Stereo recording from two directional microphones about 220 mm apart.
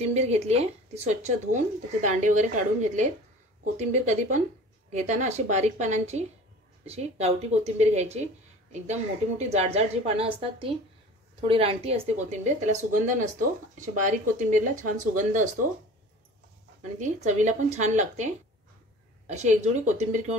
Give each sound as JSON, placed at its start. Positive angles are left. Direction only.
{"t": 0.0, "sound": "speech", "side_deg": -30}
{"t": 9.4, "sound": "speech", "side_deg": -30}
{"t": 17.0, "sound": "speech", "side_deg": -35}